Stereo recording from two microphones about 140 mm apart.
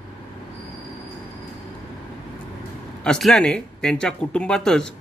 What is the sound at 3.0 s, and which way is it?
Speech, 5° left (ahead or behind).